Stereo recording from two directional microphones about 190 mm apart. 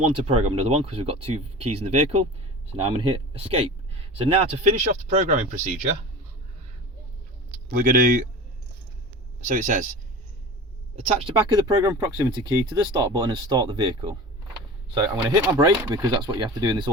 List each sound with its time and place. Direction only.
0.0 s speech: 30° right (ahead or behind)
7.7 s speech: 45° right (ahead or behind)
9.5 s speech: 45° right (ahead or behind)
10.9 s speech: 35° right (ahead or behind)